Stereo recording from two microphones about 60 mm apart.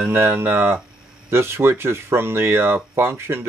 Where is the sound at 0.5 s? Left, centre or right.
Right.